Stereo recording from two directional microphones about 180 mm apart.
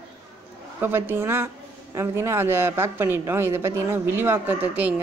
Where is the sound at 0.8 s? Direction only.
10° right (ahead or behind).